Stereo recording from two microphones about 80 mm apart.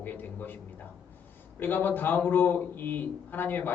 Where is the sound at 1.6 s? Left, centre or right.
Left.